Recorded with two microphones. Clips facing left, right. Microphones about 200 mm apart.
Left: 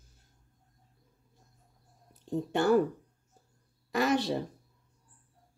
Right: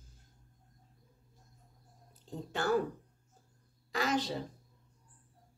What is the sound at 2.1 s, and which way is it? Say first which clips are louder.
Speech: left 10 dB; 65° left (ahead or behind).